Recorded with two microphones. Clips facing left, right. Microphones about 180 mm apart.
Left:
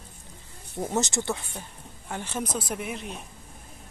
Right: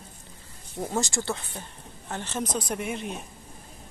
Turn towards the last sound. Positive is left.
turn(degrees=0)  # may be behind; listen again after turning